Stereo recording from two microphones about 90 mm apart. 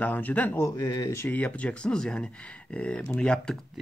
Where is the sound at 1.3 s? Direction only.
15° left (ahead or behind).